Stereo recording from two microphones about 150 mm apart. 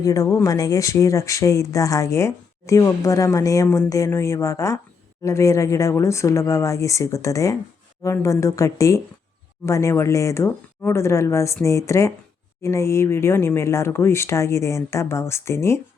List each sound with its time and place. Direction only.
0.0 s speech: 20° left (ahead or behind)